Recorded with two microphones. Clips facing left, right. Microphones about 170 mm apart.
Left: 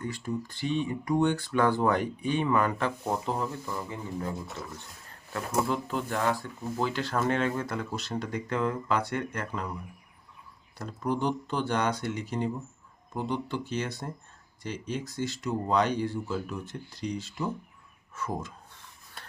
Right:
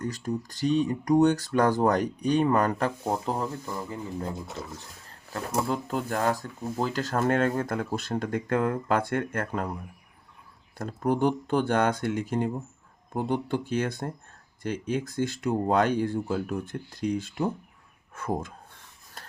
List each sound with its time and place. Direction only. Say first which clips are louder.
0.0 s speech: right 2 dB; 40° right (ahead or behind)
5.3 s speech: even; 40° right (ahead or behind)
10.8 s speech: right 5 dB; 50° right (ahead or behind)